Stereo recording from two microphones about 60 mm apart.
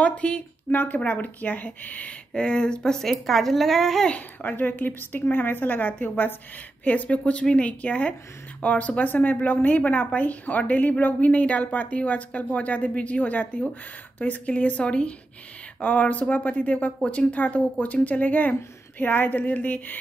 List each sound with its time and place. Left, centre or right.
0.0 s a woman's voice: centre
2.3 s speech: centre
4.1 s a woman's voice: left